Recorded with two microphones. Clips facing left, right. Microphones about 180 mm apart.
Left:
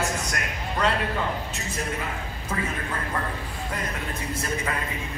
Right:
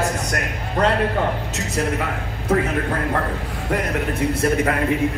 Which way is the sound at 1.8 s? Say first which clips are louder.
Right 9 dB; 80° right.